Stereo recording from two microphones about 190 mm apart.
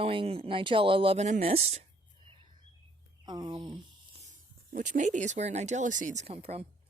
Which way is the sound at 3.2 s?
20° right (ahead or behind).